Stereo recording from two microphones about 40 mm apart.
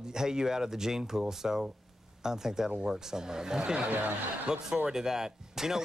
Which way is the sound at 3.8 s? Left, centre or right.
Right.